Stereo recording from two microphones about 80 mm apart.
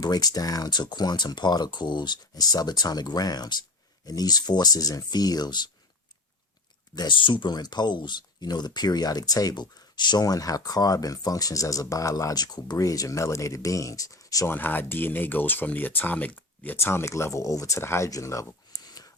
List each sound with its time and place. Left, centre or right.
0.0 s speech: left
6.9 s speech: left
14.4 s speech: left
16.7 s speech: left